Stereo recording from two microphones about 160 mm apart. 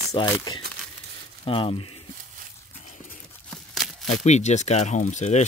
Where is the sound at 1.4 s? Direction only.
35° left (ahead or behind).